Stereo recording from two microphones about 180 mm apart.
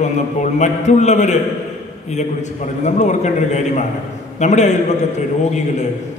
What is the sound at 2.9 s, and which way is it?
A man's voice, 40° left (ahead or behind).